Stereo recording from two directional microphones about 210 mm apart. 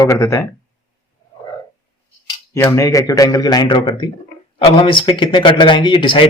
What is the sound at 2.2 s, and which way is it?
Speech, 15° left (ahead or behind).